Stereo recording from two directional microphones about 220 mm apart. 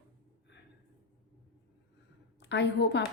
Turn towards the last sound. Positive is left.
turn(degrees=50)  # may be behind; listen again after turning